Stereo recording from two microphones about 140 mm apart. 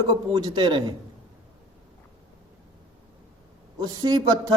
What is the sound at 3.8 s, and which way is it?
Speech, 30° right (ahead or behind).